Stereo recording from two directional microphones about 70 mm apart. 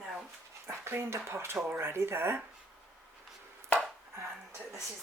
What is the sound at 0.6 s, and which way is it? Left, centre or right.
Speech, right.